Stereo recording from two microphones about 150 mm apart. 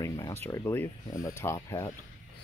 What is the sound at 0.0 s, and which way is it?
Speech, 20° left (ahead or behind).